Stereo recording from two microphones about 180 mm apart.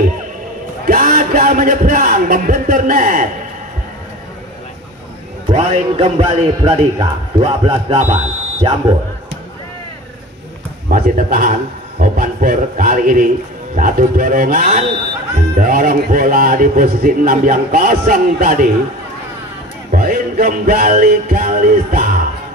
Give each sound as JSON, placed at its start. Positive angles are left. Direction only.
{"t": 0.8, "sound": "speech", "side_deg": -50}
{"t": 5.5, "sound": "speech", "side_deg": -35}
{"t": 10.9, "sound": "a man's voice", "side_deg": -50}
{"t": 19.9, "sound": "a man's voice", "side_deg": -55}